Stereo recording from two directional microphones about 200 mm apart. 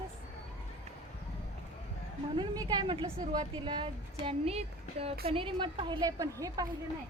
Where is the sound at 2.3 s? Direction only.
20° right (ahead or behind).